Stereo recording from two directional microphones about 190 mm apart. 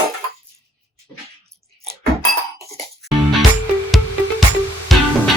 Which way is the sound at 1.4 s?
15° right (ahead or behind).